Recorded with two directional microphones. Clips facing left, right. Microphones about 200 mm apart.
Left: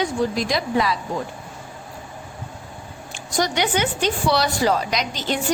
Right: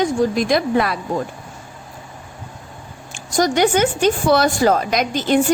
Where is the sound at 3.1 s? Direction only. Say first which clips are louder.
Right 5 dB; 45° right (ahead or behind).